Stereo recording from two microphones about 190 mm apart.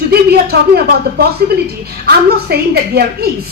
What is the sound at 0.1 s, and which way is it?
Speech, 55° right (ahead or behind).